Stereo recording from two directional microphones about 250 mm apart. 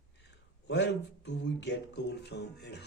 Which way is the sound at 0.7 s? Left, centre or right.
Left.